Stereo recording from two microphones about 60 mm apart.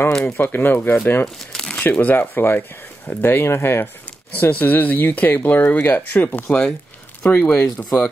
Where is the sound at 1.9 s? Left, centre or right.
Left.